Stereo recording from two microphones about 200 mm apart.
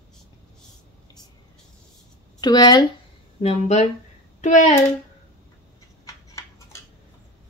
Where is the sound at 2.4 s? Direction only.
20° left (ahead or behind).